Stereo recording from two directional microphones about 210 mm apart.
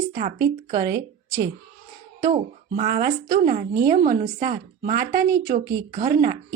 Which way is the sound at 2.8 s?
40° right (ahead or behind).